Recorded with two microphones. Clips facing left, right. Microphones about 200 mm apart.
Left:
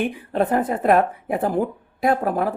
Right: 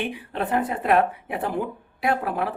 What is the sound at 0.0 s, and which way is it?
Speech, 45° left (ahead or behind).